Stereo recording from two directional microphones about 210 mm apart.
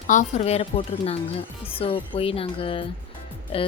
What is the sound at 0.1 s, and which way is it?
Speech, 35° left (ahead or behind).